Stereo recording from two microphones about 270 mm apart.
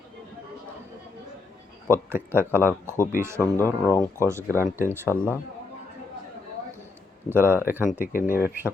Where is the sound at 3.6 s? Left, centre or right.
Centre.